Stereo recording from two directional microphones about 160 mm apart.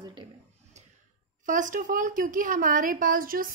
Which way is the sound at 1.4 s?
55° right (ahead or behind).